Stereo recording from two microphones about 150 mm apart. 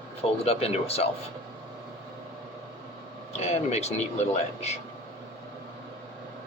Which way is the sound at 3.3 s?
45° left (ahead or behind).